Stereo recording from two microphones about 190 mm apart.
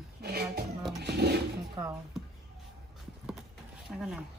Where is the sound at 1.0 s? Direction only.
60° right (ahead or behind).